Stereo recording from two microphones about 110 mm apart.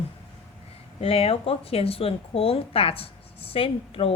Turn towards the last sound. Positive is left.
turn(degrees=60)  # may be behind; listen again after turning